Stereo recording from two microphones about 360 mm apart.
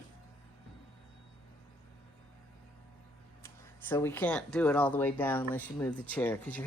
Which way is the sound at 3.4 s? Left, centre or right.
Centre.